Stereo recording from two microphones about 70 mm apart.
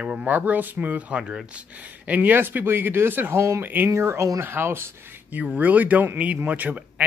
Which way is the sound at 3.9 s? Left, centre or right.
Right.